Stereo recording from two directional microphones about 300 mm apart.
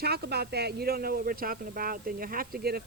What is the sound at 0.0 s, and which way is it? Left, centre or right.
Speech, right.